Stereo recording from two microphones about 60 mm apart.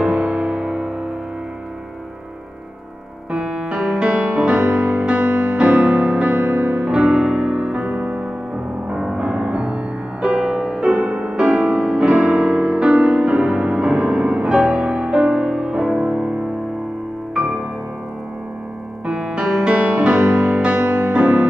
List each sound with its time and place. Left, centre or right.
0.0 s music: centre
3.3 s music: centre
19.0 s music: centre